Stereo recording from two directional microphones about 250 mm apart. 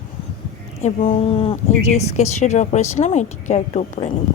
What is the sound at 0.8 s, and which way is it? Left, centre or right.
Speech, left.